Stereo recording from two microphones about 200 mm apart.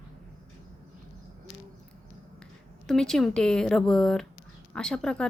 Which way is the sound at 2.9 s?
Centre (ahead or behind).